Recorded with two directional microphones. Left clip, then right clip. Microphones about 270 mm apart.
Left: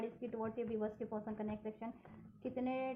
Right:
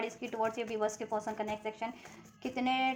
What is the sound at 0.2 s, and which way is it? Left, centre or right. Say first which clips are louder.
A woman's voice: right 8 dB; centre.